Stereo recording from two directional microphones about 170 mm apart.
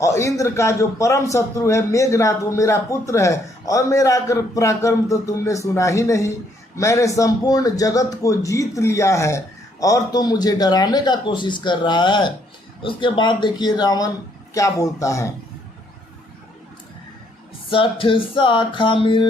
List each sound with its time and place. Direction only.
0.0 s a man's voice: 20° left (ahead or behind)
17.7 s a man's voice: 30° left (ahead or behind)